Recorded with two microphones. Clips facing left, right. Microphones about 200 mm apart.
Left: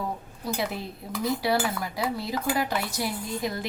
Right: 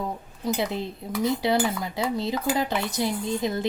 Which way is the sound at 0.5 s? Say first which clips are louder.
Right 2 dB; 20° right (ahead or behind).